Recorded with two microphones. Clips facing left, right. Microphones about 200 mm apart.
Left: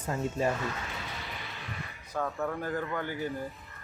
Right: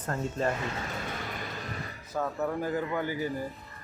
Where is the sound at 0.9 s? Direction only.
50° right (ahead or behind).